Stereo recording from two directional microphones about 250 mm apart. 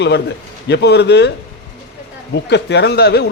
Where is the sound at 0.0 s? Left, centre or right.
Left.